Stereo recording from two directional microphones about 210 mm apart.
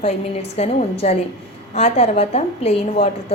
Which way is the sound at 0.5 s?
30° left (ahead or behind).